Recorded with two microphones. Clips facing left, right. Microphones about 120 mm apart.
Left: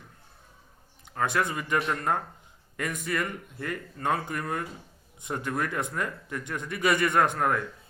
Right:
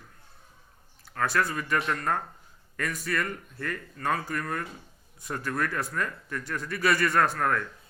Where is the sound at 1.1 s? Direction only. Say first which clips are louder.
Even; 20° left (ahead or behind).